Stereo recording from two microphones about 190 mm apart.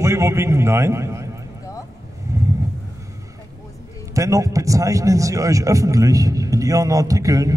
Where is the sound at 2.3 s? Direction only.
15° right (ahead or behind).